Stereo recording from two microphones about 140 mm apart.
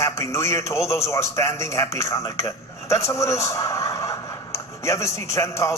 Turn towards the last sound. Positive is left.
turn(degrees=20)  # may be behind; listen again after turning